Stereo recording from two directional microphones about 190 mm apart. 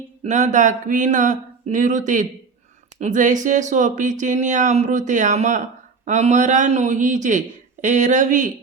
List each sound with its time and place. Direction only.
0.3 s speech: 40° right (ahead or behind)